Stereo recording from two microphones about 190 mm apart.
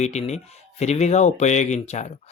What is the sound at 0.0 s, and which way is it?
Speech, 35° left (ahead or behind).